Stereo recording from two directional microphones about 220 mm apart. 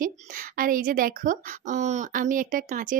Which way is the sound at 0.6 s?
40° right (ahead or behind).